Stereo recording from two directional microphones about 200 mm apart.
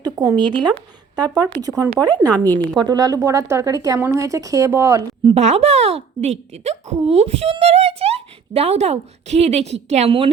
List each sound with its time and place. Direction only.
0.0 s a woman's voice: 20° right (ahead or behind)
5.3 s speech: 35° right (ahead or behind)